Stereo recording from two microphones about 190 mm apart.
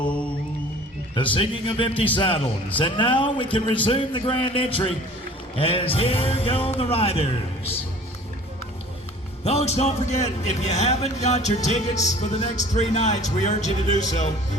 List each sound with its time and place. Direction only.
1.1 s a man's voice: 25° left (ahead or behind)
9.4 s a man's voice: 35° left (ahead or behind)